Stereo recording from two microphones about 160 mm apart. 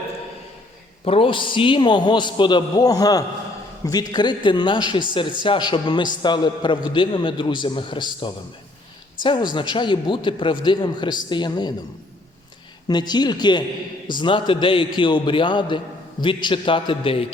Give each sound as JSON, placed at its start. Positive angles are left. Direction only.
{"t": 1.0, "sound": "a man's voice", "side_deg": 35}
{"t": 12.9, "sound": "a man's voice", "side_deg": 25}